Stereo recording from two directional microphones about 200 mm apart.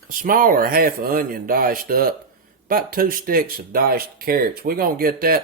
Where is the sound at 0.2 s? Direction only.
45° right (ahead or behind).